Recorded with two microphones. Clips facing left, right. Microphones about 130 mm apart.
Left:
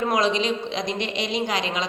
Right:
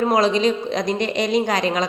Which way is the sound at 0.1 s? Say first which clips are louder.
Right 4 dB; 35° right (ahead or behind).